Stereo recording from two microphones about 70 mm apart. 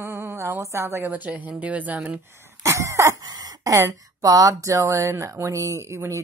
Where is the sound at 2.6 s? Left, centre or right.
Right.